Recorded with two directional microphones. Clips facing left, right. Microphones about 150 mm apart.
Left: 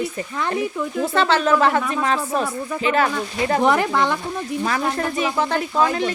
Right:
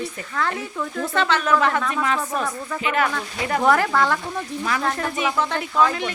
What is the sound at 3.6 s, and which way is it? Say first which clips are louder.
Speech: right 1 dB; 20° left (ahead or behind).